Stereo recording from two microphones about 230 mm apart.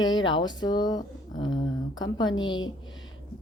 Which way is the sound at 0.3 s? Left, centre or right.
Centre.